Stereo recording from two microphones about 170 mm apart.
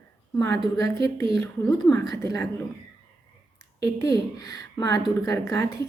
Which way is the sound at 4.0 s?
20° left (ahead or behind).